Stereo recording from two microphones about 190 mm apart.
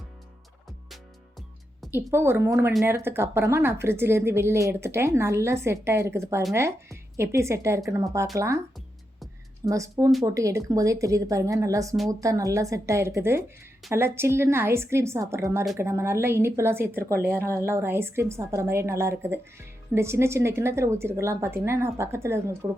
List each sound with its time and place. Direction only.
1.9 s a woman's voice: 10° right (ahead or behind)
9.6 s a woman's voice: 15° right (ahead or behind)